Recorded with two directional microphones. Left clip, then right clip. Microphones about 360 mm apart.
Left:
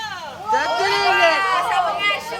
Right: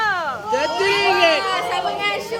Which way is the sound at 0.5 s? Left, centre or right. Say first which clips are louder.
Left 1 dB; centre.